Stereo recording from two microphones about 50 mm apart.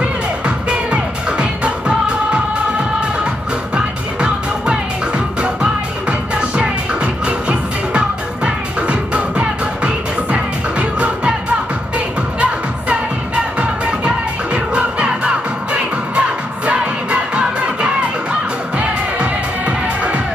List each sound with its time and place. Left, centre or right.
0.7 s music: right
3.7 s music: centre
13.6 s music: right
18.8 s music: right